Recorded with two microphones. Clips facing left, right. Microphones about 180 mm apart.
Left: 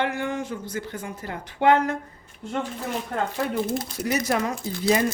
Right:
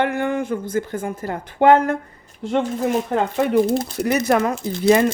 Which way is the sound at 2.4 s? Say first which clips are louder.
Right 9 dB; 90° right.